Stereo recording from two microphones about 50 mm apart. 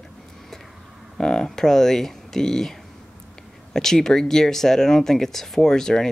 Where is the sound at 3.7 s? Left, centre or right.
Centre.